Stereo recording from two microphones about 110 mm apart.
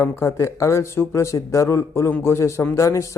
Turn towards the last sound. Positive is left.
turn(degrees=25)  # may be behind; listen again after turning